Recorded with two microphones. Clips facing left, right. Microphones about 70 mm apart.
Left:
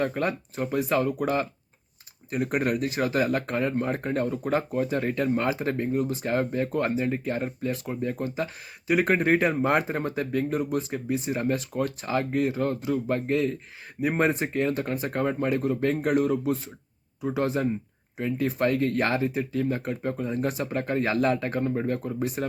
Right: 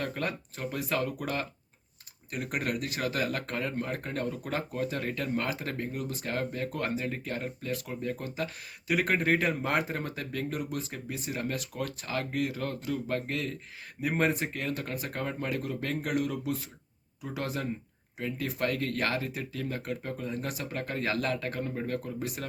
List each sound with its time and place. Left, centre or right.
0.0 s speech: left